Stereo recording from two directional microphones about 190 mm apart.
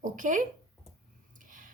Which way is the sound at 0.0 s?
45° right (ahead or behind).